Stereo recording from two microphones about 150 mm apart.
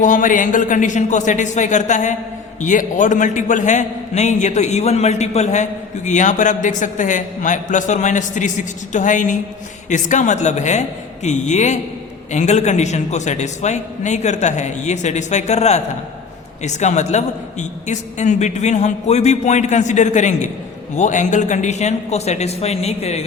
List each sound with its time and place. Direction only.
0.0 s a man's voice: 60° left (ahead or behind)